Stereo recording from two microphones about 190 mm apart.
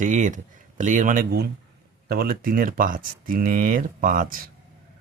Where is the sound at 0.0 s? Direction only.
40° right (ahead or behind).